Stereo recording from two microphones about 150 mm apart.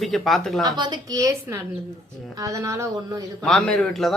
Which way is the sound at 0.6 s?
30° right (ahead or behind).